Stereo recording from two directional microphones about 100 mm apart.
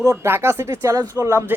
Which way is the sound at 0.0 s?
30° right (ahead or behind).